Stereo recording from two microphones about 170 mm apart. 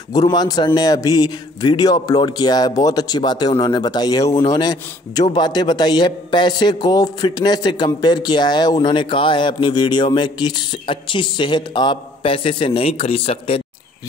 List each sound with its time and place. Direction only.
0.1 s a man's voice: 25° left (ahead or behind)